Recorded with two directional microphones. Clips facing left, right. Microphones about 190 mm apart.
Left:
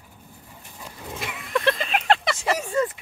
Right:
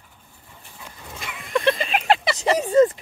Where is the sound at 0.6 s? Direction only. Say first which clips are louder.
Left 3 dB; 5° left (ahead or behind).